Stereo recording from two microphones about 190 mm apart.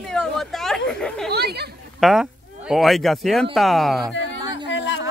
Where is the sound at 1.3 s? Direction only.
55° right (ahead or behind).